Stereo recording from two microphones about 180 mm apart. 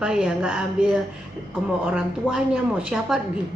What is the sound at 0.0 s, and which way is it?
Speech, 5° right (ahead or behind).